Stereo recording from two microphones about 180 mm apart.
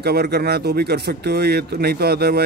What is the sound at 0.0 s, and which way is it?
Speech, 65° right (ahead or behind).